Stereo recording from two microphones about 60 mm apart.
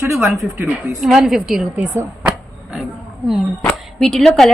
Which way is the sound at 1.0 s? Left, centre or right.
Centre.